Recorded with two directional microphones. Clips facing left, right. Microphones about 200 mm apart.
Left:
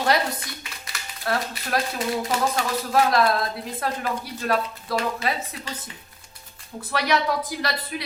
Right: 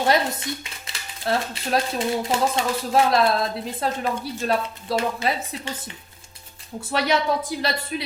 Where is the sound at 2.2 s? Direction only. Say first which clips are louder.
Right 2 dB; 25° right (ahead or behind).